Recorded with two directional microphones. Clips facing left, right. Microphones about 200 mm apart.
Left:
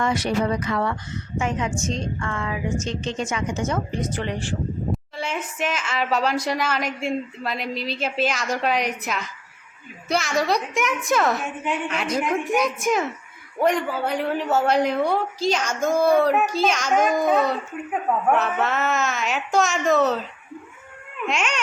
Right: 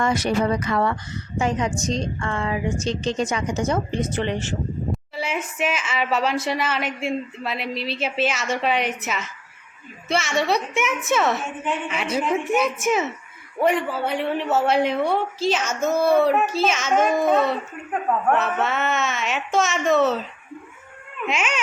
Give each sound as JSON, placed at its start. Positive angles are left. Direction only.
{"t": 0.0, "sound": "a woman's voice", "side_deg": -45}
{"t": 4.9, "sound": "a sound", "side_deg": -5}
{"t": 5.5, "sound": "a woman's voice", "side_deg": -5}
{"t": 21.2, "sound": "a woman's voice", "side_deg": -5}